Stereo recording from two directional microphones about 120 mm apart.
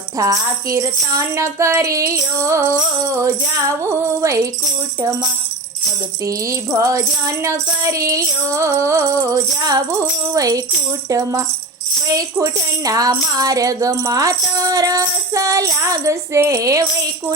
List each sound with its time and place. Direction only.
0.2 s speech: 25° right (ahead or behind)
6.7 s speech: 30° right (ahead or behind)